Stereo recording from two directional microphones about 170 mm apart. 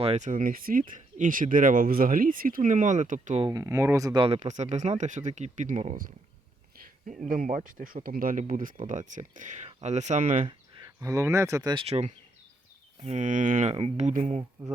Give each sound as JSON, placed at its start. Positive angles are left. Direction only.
{"t": 0.0, "sound": "speech", "side_deg": -40}
{"t": 3.4, "sound": "speech", "side_deg": -20}
{"t": 4.4, "sound": "speech", "side_deg": -45}
{"t": 11.0, "sound": "speech", "side_deg": -20}